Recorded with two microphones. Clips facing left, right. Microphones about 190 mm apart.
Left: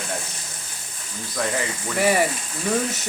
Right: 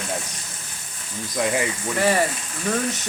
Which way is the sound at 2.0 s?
10° left (ahead or behind).